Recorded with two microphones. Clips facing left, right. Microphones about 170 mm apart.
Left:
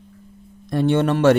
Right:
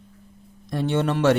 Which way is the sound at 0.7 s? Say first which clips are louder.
Left 5 dB; 55° left (ahead or behind).